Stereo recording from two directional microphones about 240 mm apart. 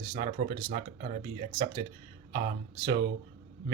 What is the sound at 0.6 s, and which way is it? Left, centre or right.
Speech, right.